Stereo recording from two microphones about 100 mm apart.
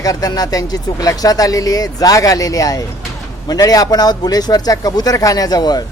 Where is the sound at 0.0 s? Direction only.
35° left (ahead or behind).